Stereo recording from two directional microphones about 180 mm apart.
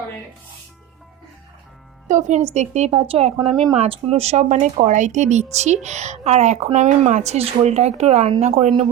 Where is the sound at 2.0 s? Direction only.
45° right (ahead or behind).